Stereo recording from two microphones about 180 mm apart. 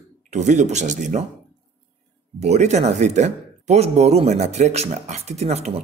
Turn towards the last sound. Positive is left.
turn(degrees=-35)  # may be behind; listen again after turning